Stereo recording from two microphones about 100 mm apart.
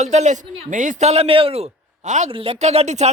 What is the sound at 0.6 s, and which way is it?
Speech, 90° right.